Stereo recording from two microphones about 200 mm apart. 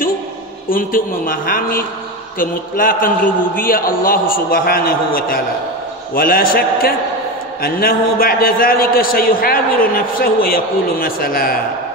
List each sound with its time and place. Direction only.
0.7 s a man's voice: 45° left (ahead or behind)